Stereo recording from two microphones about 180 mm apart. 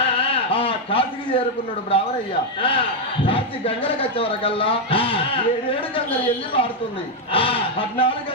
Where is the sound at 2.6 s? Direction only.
30° left (ahead or behind).